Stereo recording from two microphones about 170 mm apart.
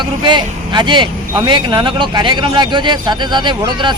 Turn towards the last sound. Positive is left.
turn(degrees=-25)  # may be behind; listen again after turning